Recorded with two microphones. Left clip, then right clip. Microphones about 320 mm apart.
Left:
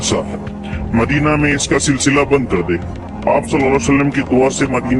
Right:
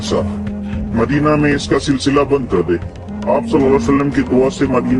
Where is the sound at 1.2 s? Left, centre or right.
Left.